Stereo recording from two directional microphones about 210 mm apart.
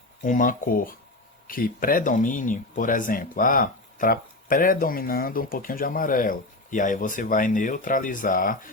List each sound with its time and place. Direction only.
0.2 s speech: 40° left (ahead or behind)